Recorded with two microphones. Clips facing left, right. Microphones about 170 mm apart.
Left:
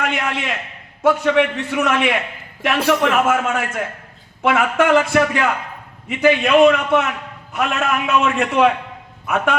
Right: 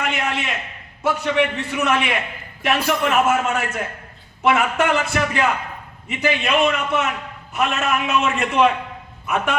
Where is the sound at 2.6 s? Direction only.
80° left.